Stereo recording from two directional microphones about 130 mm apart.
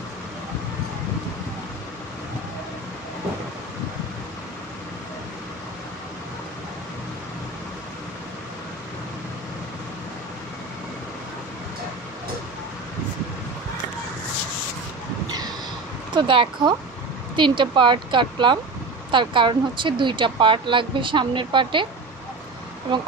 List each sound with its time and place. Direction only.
16.1 s speech: 40° right (ahead or behind)